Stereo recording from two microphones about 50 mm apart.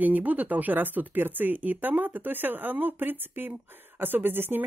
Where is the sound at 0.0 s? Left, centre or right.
Right.